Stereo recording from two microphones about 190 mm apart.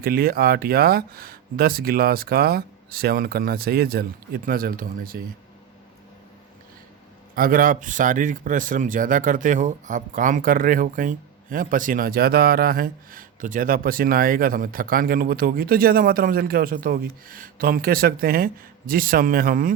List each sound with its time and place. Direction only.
0.0 s a man's voice: 55° right (ahead or behind)
7.3 s a man's voice: 50° right (ahead or behind)